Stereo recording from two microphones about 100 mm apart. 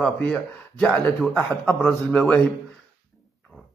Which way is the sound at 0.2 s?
10° left (ahead or behind).